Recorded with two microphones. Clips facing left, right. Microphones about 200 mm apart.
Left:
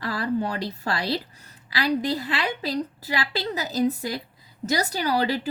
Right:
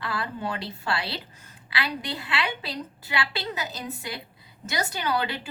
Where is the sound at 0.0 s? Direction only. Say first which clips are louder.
Left 6 dB; 40° left (ahead or behind).